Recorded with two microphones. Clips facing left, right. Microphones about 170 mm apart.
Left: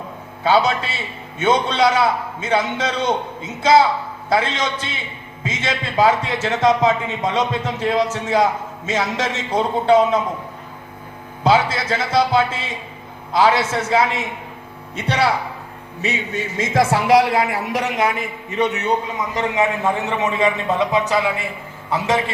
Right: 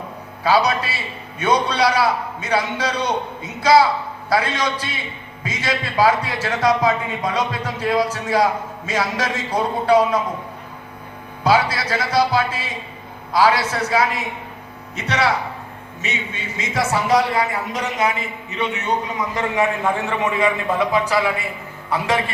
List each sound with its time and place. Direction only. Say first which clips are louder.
0.4 s a man's voice: left 1 dB; 25° left (ahead or behind)
11.4 s a man's voice: left 1 dB; 25° left (ahead or behind); by 18.8 s 45° left (ahead or behind)
19.3 s a man's voice: left 1 dB; 20° left (ahead or behind)